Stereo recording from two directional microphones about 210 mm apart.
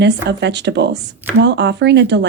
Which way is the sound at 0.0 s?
55° right (ahead or behind).